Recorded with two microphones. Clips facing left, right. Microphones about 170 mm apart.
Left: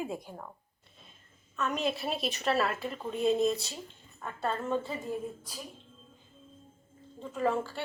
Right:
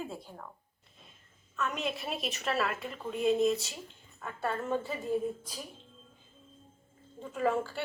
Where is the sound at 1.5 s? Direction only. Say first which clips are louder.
Left 2 dB; centre (ahead or behind).